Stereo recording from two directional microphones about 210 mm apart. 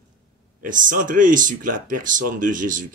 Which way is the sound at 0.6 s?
40° right (ahead or behind).